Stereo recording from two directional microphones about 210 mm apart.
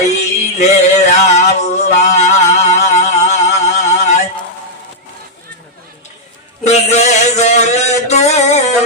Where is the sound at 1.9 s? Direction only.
35° left (ahead or behind).